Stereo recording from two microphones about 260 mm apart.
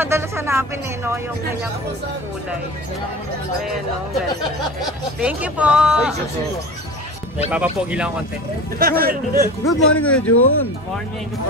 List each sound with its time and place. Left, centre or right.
0.0 s speech: centre
5.2 s speech: centre
7.5 s speech: centre
8.7 s a man's voice: right
9.7 s speech: centre
10.3 s speech: left